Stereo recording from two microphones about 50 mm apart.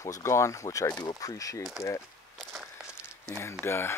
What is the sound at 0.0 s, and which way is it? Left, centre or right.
Speech, left.